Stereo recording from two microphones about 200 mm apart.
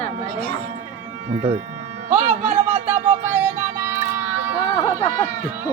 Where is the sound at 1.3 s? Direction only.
25° right (ahead or behind).